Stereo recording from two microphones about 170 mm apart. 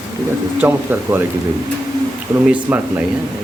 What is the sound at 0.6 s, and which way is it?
Speech, 10° right (ahead or behind).